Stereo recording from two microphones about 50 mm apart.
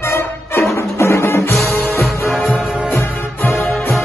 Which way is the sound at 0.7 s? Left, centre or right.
Left.